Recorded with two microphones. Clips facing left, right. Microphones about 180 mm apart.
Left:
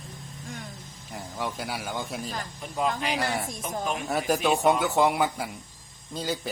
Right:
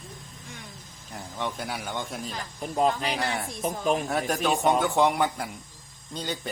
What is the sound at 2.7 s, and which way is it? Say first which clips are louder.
Speech: right 3 dB; 40° right (ahead or behind).